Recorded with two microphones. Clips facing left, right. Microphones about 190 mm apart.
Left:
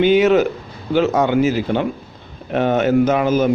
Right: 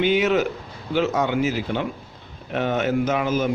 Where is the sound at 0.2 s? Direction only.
40° left (ahead or behind).